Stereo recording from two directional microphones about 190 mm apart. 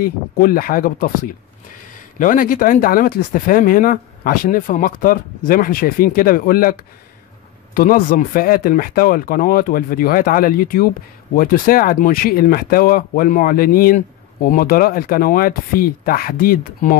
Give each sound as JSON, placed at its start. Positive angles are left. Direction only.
{"t": 0.0, "sound": "speech", "side_deg": 50}
{"t": 2.1, "sound": "speech", "side_deg": 45}